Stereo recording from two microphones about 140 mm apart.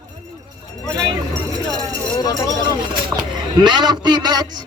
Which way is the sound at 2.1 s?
25° left (ahead or behind).